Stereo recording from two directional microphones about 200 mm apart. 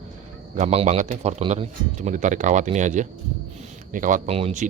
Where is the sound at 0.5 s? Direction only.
35° right (ahead or behind).